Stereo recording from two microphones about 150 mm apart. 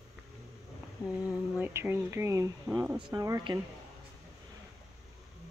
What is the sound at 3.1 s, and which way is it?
Speech, 25° right (ahead or behind).